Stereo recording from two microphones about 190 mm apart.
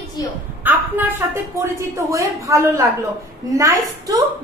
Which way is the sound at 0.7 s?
10° right (ahead or behind).